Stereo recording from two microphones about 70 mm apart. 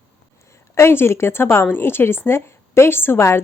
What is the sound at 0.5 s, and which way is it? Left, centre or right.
A woman's voice, left.